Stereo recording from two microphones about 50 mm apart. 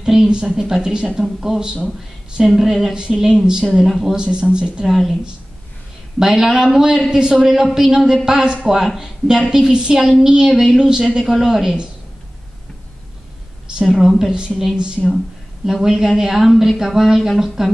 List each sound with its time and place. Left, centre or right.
0.0 s speech: centre
4.2 s speech: centre
4.8 s speech: centre
6.1 s speech: centre
13.8 s speech: centre
15.0 s speech: centre